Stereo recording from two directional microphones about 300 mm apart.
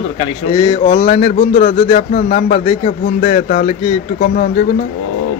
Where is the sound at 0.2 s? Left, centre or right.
Centre.